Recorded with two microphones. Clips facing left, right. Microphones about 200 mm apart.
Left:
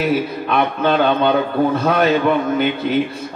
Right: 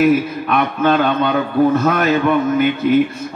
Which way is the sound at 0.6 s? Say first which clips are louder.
Right 1 dB; 30° left (ahead or behind).